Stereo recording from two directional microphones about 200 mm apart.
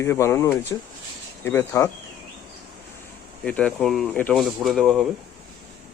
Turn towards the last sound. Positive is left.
turn(degrees=0)  # may be behind; listen again after turning